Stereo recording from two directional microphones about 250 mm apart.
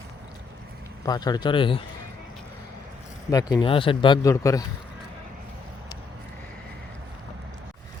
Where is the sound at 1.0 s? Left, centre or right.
Centre.